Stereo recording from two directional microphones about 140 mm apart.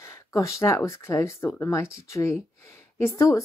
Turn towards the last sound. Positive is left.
turn(degrees=20)  # may be behind; listen again after turning